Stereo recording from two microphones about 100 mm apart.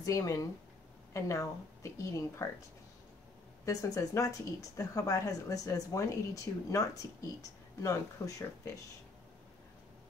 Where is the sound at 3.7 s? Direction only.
35° left (ahead or behind).